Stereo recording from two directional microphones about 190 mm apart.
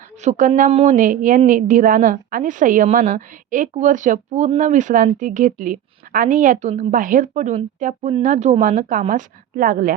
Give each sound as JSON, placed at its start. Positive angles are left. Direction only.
{"t": 0.2, "sound": "a woman's voice", "side_deg": -40}
{"t": 0.7, "sound": "a woman's voice", "side_deg": -30}
{"t": 0.9, "sound": "a woman's voice", "side_deg": -45}